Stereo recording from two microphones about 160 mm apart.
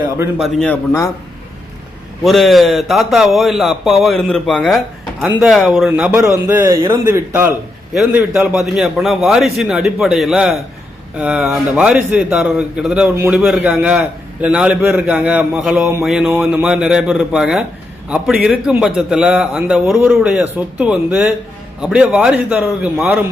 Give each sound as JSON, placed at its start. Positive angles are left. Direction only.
{"t": 0.3, "sound": "a man's voice", "side_deg": 0}
{"t": 0.7, "sound": "a man's voice", "side_deg": 15}
{"t": 2.2, "sound": "a man's voice", "side_deg": 0}
{"t": 7.9, "sound": "a man's voice", "side_deg": -5}
{"t": 13.3, "sound": "a man's voice", "side_deg": -5}